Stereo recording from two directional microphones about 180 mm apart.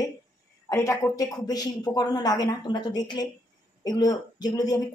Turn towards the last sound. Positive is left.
turn(degrees=20)  # may be behind; listen again after turning